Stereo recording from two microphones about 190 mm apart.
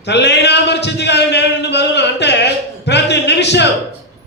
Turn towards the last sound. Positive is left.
turn(degrees=65)  # may be behind; listen again after turning